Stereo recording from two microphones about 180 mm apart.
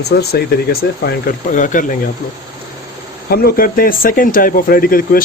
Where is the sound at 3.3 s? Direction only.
55° left (ahead or behind).